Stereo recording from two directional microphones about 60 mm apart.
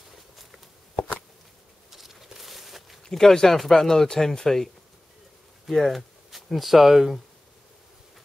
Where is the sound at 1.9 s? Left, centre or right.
Centre.